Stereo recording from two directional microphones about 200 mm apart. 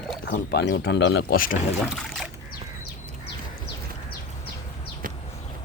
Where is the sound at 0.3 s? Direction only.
55° left (ahead or behind).